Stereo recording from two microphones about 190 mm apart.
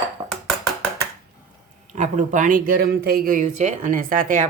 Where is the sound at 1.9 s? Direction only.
40° right (ahead or behind).